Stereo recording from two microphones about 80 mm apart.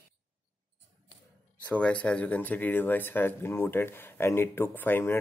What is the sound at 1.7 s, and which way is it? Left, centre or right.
Speech, centre.